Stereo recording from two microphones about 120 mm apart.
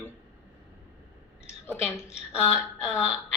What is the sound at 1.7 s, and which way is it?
Speech, 20° left (ahead or behind).